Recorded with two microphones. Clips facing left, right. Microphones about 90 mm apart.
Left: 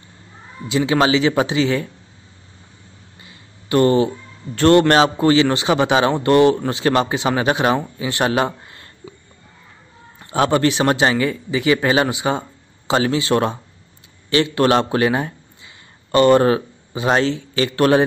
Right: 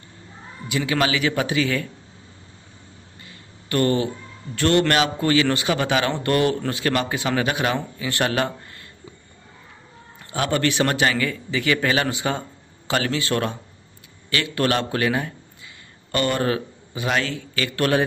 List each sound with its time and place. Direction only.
0.7 s speech: 25° left (ahead or behind)
3.6 s speech: 25° left (ahead or behind)
4.6 s speech: 35° left (ahead or behind)
10.3 s a man's voice: 30° left (ahead or behind)